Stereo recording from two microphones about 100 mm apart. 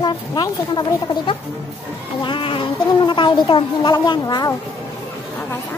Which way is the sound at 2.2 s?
60° left (ahead or behind).